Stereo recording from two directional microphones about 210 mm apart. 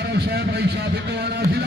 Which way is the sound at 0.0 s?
50° right (ahead or behind).